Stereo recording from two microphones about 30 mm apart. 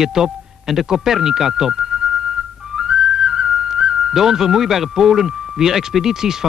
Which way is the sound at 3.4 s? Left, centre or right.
Centre.